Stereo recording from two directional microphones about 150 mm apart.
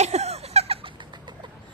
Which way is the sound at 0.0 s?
45° right (ahead or behind).